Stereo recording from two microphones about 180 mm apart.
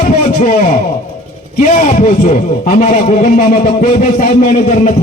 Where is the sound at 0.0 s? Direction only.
40° left (ahead or behind).